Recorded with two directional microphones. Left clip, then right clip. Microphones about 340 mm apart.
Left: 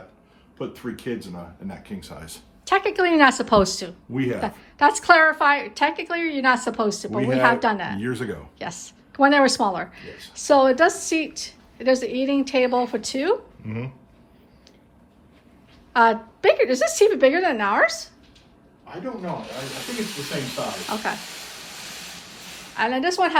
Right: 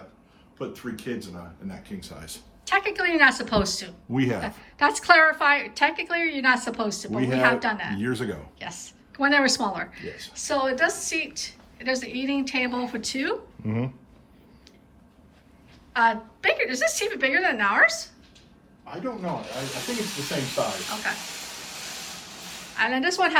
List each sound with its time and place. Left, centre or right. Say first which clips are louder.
0.6 s speech: left 3 dB; left
1.8 s a woman's voice: left 2 dB; centre
4.1 s speech: even; centre
4.4 s a woman's voice: left 3 dB; centre
13.7 s speech: right 4 dB; centre
15.9 s a woman's voice: left 4 dB; centre
21.1 s a woman's voice: left 1 dB; centre
22.8 s a woman's voice: left 2 dB; centre